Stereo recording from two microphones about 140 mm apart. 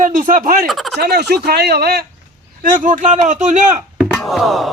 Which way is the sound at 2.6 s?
70° right (ahead or behind).